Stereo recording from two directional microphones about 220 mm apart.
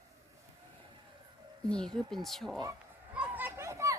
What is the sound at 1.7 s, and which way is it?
Speech, 5° left (ahead or behind).